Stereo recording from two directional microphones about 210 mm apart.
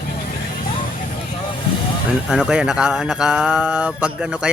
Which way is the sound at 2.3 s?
5° right (ahead or behind).